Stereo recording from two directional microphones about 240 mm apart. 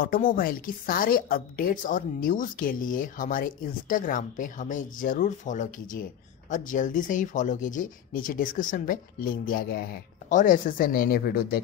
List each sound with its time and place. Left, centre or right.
0.0 s a woman's voice: left